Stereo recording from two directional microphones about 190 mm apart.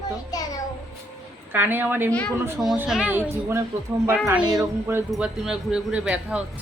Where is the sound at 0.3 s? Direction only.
20° left (ahead or behind).